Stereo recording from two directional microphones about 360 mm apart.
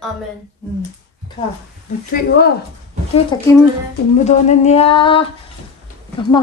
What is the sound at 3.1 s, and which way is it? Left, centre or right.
Speech, centre.